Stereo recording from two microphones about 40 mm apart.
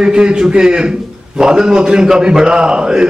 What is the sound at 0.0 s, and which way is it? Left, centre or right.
A man's voice, right.